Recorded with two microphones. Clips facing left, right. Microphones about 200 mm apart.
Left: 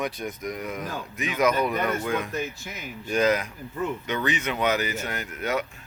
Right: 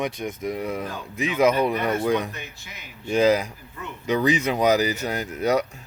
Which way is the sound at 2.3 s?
45° left (ahead or behind).